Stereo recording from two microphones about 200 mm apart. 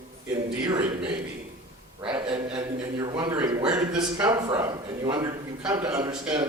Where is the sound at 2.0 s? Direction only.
25° right (ahead or behind).